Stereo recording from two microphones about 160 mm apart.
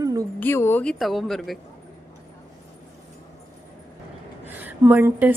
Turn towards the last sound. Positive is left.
turn(degrees=-10)  # may be behind; listen again after turning